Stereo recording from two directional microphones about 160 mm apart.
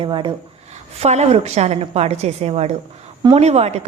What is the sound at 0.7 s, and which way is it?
A woman's voice, 45° right (ahead or behind).